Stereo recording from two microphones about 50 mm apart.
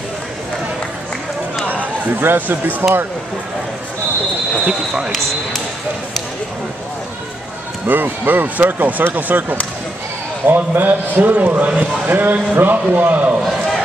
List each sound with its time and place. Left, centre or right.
2.1 s a man's voice: right
4.6 s speech: centre
7.8 s a man's voice: right
12.1 s a man's voice: right